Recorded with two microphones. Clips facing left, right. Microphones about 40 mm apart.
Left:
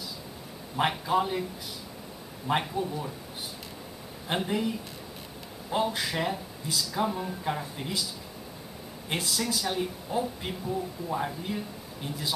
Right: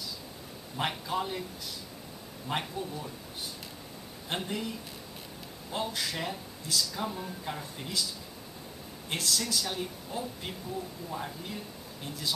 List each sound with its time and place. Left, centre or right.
0.7 s speech: centre
2.4 s speech: centre
4.3 s speech: centre
9.1 s speech: centre